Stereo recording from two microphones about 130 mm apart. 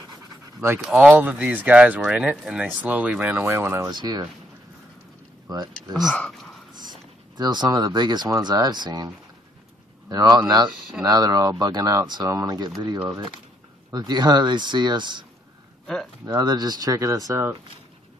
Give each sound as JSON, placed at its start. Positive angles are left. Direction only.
{"t": 0.7, "sound": "speech", "side_deg": -5}
{"t": 3.9, "sound": "speech", "side_deg": -30}
{"t": 5.5, "sound": "speech", "side_deg": -30}
{"t": 5.9, "sound": "speech", "side_deg": 5}
{"t": 6.8, "sound": "speech", "side_deg": -30}
{"t": 13.9, "sound": "speech", "side_deg": -35}
{"t": 16.3, "sound": "speech", "side_deg": -30}